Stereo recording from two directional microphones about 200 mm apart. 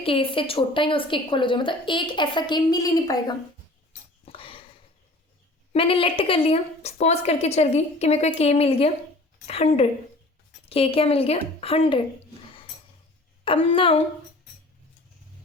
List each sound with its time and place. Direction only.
0.0 s a woman's voice: 25° left (ahead or behind)
4.3 s dog: 25° left (ahead or behind)
5.7 s a woman's voice: 25° left (ahead or behind)
13.4 s a woman's voice: 25° left (ahead or behind)